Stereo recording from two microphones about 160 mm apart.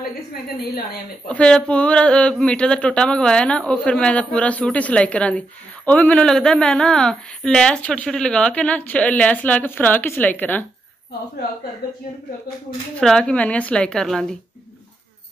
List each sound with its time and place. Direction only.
0.0 s a woman's voice: 75° left (ahead or behind)
1.3 s a woman's voice: 5° left (ahead or behind)
13.0 s a woman's voice: 5° left (ahead or behind)